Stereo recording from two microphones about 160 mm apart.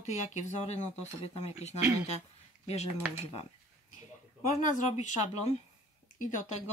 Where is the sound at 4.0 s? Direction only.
50° left (ahead or behind).